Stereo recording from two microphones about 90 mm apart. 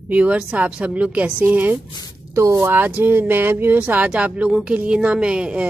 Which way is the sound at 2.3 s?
35° right (ahead or behind).